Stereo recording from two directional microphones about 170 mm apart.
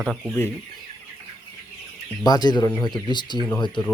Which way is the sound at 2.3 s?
25° left (ahead or behind).